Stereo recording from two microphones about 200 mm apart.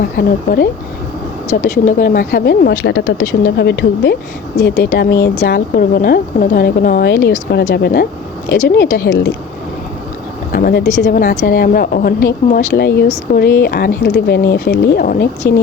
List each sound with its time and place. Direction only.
0.2 s a woman's voice: 45° left (ahead or behind)
10.5 s a woman's voice: 50° left (ahead or behind)